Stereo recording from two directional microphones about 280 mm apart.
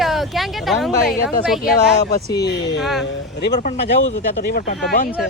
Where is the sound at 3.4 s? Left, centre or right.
Left.